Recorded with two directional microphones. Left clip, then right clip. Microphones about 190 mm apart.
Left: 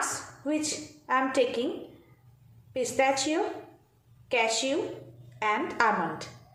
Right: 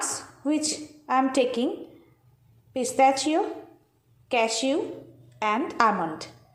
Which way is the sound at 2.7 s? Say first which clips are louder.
Right 5 dB; 30° right (ahead or behind).